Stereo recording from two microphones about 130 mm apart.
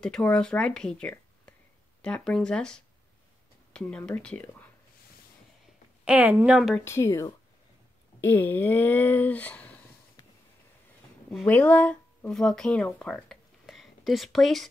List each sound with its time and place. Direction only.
0.0 s speech: 5° left (ahead or behind)
6.0 s speech: 10° right (ahead or behind)
6.7 s speech: 20° left (ahead or behind)
11.4 s speech: 10° left (ahead or behind)